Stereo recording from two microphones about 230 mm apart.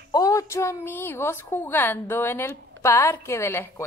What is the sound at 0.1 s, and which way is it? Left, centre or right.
A woman's voice, centre.